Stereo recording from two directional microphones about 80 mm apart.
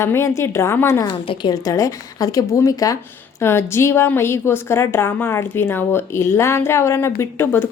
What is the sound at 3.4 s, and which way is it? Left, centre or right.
A woman's voice, left.